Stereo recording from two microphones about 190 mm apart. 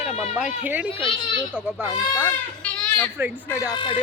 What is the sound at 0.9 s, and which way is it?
Speech, 25° left (ahead or behind).